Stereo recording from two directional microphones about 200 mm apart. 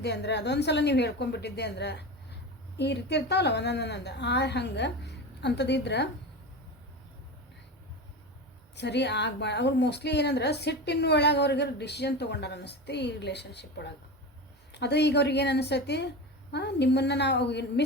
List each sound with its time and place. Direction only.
0.0 s a woman's voice: 55° left (ahead or behind)
8.7 s a woman's voice: 60° left (ahead or behind)